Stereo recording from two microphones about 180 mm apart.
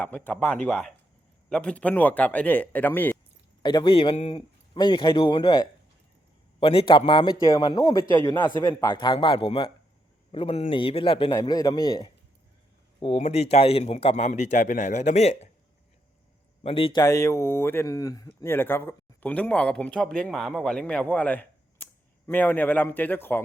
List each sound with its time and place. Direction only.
0.0 s speech: 10° left (ahead or behind)
3.6 s speech: 25° left (ahead or behind)
8.2 s speech: 15° left (ahead or behind)
8.8 s speech: 25° left (ahead or behind)
11.3 s speech: 20° left (ahead or behind)
13.0 s speech: 35° left (ahead or behind)
16.6 s speech: 30° left (ahead or behind); by 23.4 s 10° left (ahead or behind)